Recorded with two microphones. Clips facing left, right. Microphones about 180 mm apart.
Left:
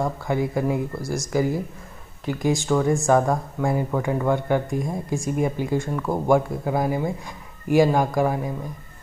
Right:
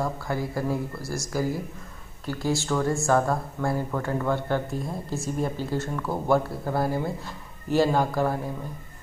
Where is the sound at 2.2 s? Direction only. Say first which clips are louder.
Left 4 dB; 15° left (ahead or behind).